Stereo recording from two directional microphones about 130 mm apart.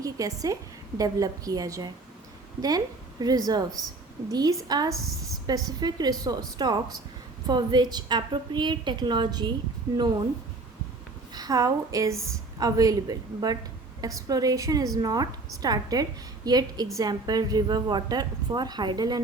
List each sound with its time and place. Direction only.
0.0 s a woman's voice: 25° right (ahead or behind)
4.9 s a woman's voice: centre (ahead or behind)
5.5 s speech: 30° right (ahead or behind)
11.3 s a woman's voice: 30° right (ahead or behind)